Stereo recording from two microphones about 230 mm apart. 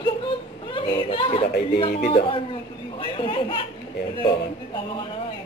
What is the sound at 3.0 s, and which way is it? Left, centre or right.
Speech, left.